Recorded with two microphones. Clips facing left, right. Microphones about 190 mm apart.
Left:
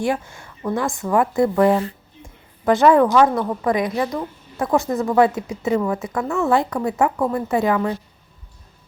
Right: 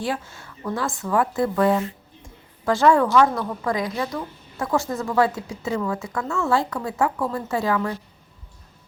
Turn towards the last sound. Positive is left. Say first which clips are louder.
# left 4 dB
turn(degrees=20)  # may be behind; listen again after turning